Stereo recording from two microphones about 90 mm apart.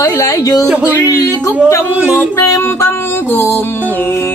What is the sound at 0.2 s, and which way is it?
Speech, 40° left (ahead or behind).